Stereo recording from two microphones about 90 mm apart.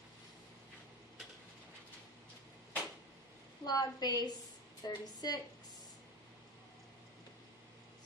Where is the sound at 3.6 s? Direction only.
45° left (ahead or behind).